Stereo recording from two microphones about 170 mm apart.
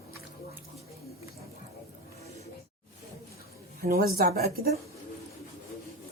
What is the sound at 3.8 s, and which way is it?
Speech, 60° right (ahead or behind).